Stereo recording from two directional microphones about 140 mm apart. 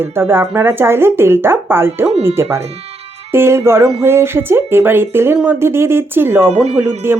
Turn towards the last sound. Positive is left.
turn(degrees=-15)  # may be behind; listen again after turning